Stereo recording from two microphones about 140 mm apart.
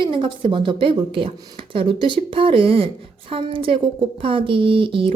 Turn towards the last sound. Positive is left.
turn(degrees=-40)  # may be behind; listen again after turning